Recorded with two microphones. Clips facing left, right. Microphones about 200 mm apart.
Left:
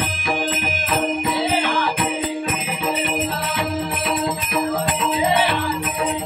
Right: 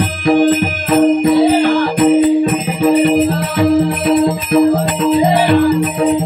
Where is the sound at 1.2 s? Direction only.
35° right (ahead or behind).